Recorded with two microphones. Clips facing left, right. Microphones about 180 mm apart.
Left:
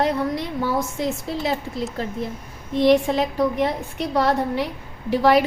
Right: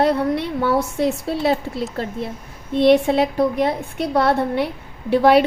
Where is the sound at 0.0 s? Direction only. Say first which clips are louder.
Right 4 dB; 60° right (ahead or behind).